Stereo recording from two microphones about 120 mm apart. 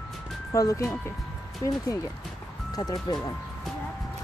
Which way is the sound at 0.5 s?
30° left (ahead or behind).